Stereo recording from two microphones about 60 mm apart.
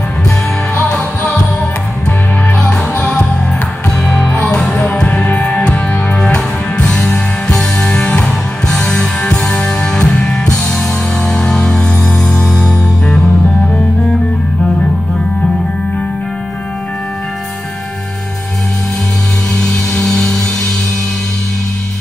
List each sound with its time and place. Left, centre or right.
0.8 s music: centre
4.5 s music: centre
20.0 s a sound: centre